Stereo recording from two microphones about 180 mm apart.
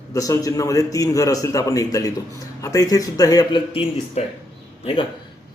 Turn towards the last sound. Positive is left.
turn(degrees=30)  # may be behind; listen again after turning